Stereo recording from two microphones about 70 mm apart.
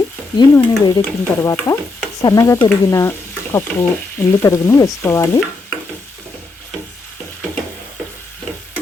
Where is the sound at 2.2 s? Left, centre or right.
Left.